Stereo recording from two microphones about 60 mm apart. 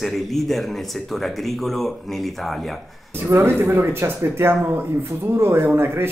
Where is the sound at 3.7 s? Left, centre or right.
Right.